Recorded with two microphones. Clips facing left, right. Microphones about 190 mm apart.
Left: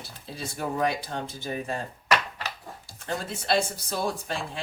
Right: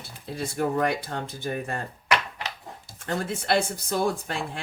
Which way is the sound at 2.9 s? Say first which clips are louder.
Right 3 dB; 55° right (ahead or behind).